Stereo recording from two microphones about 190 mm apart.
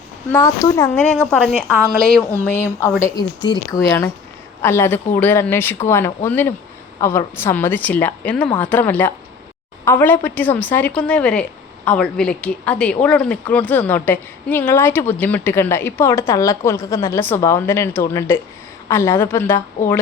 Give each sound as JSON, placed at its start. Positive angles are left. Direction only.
{"t": 0.3, "sound": "speech", "side_deg": 15}
{"t": 0.9, "sound": "a woman's voice", "side_deg": 5}
{"t": 3.0, "sound": "speech", "side_deg": 20}